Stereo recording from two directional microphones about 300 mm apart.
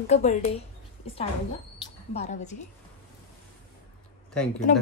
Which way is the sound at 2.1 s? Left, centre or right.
Left.